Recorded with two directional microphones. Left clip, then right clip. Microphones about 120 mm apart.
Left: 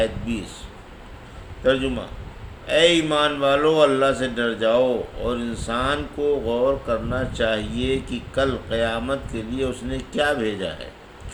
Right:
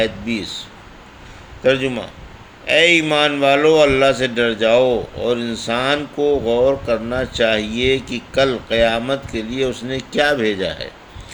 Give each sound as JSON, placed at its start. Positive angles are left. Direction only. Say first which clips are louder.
{"t": 1.6, "sound": "speech", "louder": "right 4 dB", "side_deg": -55}